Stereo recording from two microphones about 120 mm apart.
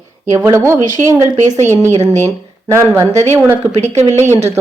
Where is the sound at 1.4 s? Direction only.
85° right.